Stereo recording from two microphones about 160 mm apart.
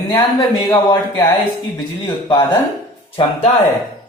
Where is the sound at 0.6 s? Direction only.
20° left (ahead or behind).